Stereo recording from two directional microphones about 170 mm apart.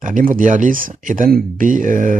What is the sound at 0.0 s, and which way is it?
Speech, 50° right (ahead or behind).